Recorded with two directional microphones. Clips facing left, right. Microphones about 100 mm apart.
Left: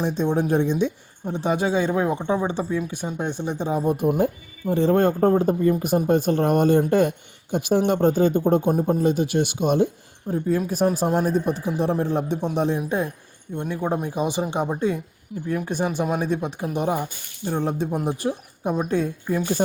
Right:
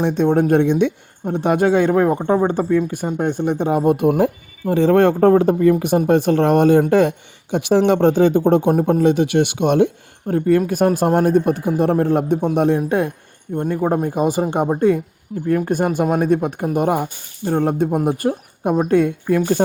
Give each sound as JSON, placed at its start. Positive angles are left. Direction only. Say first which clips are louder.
{"t": 0.0, "sound": "speech", "louder": "right 6 dB", "side_deg": -60}
{"t": 13.6, "sound": "speech", "louder": "right 6 dB", "side_deg": -45}